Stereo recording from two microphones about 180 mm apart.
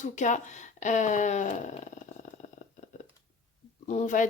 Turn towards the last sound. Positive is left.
turn(degrees=45)  # may be behind; listen again after turning